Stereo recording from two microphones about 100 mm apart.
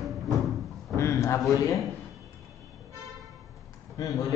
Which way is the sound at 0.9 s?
30° left (ahead or behind).